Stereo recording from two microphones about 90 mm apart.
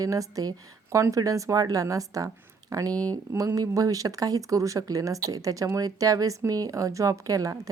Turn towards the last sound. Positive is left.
turn(degrees=-40)  # may be behind; listen again after turning